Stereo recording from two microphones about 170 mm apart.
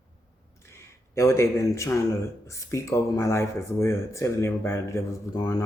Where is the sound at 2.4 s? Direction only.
15° left (ahead or behind).